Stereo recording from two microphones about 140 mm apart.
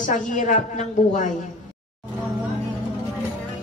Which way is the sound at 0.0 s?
65° left (ahead or behind).